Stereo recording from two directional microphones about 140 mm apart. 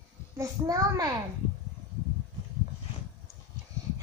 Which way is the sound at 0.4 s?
25° right (ahead or behind).